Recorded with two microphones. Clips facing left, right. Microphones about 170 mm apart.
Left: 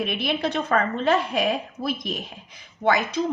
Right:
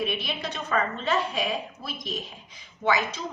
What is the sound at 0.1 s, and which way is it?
Speech, 60° left (ahead or behind).